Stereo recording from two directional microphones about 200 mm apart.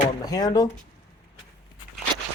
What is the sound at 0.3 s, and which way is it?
Speech, 20° left (ahead or behind).